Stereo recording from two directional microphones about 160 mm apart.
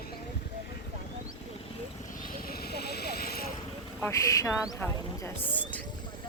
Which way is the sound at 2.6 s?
80° left.